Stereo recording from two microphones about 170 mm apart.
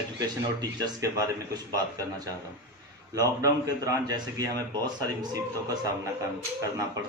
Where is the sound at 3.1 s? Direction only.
20° right (ahead or behind).